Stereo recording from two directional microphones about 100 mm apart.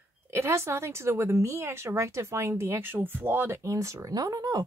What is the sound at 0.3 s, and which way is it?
A woman's voice, 25° right (ahead or behind).